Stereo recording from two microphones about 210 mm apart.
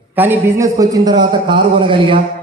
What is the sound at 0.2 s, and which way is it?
A man's voice, 10° right (ahead or behind).